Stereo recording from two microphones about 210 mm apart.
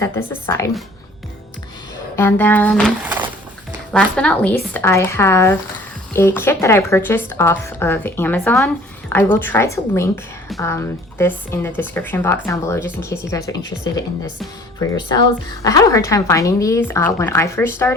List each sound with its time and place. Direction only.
0.0 s a woman's voice: 10° left (ahead or behind)
2.1 s a woman's voice: 10° left (ahead or behind)
3.9 s a woman's voice: 5° left (ahead or behind)
14.8 s a woman's voice: 15° left (ahead or behind)